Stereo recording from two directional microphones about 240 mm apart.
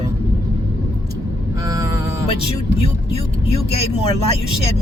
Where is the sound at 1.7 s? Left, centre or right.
Centre.